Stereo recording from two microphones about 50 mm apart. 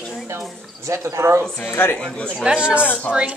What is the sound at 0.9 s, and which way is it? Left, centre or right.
Speech, right.